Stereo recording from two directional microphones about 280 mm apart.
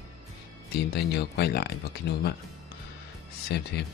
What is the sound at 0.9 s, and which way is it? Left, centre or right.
A man's voice, left.